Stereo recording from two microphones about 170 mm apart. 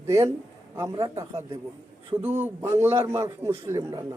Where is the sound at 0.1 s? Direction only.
15° right (ahead or behind).